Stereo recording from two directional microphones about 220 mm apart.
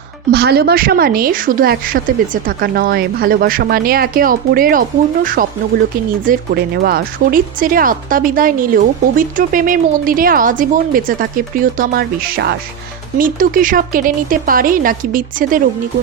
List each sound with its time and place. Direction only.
0.3 s speech: 45° right (ahead or behind)